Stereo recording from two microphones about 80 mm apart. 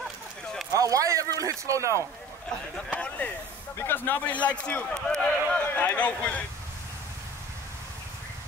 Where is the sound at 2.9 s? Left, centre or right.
Centre.